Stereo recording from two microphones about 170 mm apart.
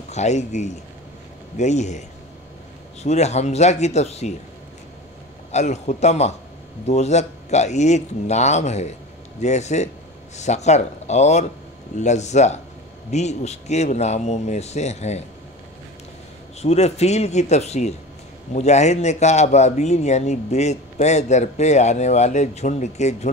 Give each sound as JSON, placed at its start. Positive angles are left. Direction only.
{"t": 0.1, "sound": "a man's voice", "side_deg": 40}
{"t": 5.5, "sound": "a man's voice", "side_deg": 40}
{"t": 16.6, "sound": "a man's voice", "side_deg": 40}